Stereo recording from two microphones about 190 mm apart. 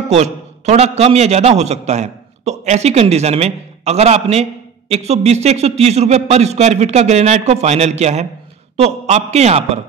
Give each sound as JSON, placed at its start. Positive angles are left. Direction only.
{"t": 0.1, "sound": "a man's voice", "side_deg": -35}